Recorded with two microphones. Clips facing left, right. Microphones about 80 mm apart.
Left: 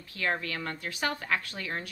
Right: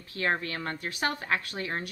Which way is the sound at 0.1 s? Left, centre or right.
Right.